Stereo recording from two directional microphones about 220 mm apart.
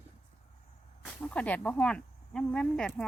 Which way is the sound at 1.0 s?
5° left (ahead or behind).